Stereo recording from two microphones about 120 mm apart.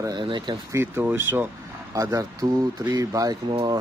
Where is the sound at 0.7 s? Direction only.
20° right (ahead or behind).